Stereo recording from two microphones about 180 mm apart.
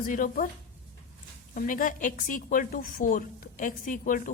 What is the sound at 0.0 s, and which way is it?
Speech, 50° left (ahead or behind).